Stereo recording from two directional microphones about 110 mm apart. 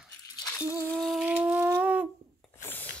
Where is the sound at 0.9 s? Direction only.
5° left (ahead or behind).